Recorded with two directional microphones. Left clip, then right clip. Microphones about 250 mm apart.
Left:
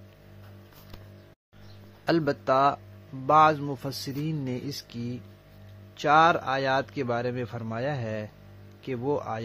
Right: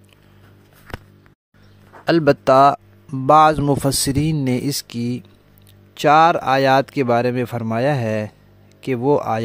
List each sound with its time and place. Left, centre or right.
2.2 s speech: right